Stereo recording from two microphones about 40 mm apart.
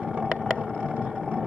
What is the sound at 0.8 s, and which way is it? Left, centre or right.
Vehicle, right.